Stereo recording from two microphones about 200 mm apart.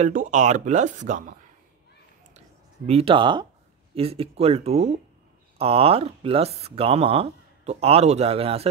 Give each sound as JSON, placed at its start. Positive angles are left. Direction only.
{"t": 0.0, "sound": "speech", "side_deg": -40}
{"t": 2.9, "sound": "speech", "side_deg": -25}